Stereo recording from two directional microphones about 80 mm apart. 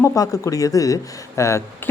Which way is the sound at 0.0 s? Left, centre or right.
Left.